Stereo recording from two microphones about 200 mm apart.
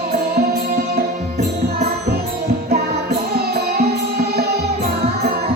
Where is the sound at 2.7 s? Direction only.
50° right (ahead or behind).